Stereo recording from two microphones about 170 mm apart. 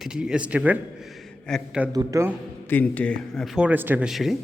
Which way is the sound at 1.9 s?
20° right (ahead or behind).